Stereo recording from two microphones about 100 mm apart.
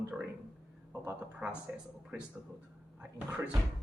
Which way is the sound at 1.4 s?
10° right (ahead or behind).